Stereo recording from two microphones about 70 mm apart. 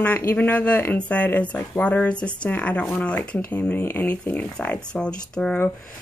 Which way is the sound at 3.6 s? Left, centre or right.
Left.